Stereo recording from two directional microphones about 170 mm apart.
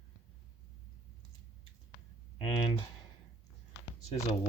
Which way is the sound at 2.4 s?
30° left (ahead or behind).